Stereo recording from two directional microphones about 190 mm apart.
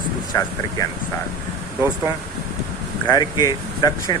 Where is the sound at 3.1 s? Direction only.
20° left (ahead or behind).